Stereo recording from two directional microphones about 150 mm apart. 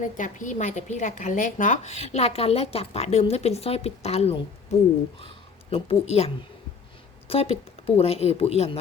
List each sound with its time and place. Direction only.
0.0 s a woman's voice: 55° left (ahead or behind)
5.7 s a woman's voice: 40° left (ahead or behind)